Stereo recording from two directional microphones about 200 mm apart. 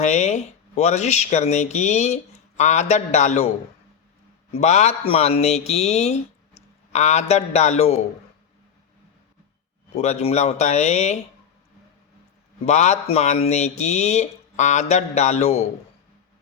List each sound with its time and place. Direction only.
0.0 s speech: 35° left (ahead or behind)
4.5 s speech: 35° left (ahead or behind)
9.9 s speech: 35° left (ahead or behind)
12.6 s speech: 35° left (ahead or behind)